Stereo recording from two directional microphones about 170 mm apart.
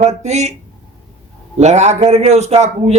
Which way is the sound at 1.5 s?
40° right (ahead or behind).